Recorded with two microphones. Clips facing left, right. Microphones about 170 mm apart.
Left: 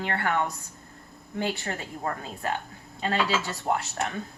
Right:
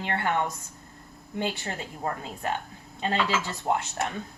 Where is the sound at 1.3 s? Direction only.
20° right (ahead or behind).